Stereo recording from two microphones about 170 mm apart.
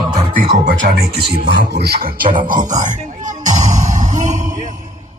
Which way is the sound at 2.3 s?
50° right (ahead or behind).